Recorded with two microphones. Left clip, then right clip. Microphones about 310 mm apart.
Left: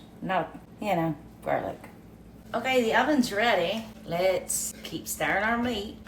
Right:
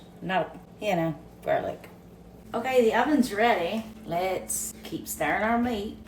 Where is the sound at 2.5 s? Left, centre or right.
Centre.